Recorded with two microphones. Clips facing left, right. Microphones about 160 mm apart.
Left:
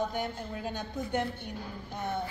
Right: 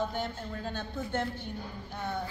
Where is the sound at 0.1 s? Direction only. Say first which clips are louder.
Left 1 dB; 15° left (ahead or behind).